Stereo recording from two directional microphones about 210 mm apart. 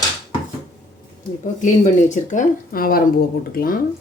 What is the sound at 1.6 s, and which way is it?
Speech, 35° left (ahead or behind).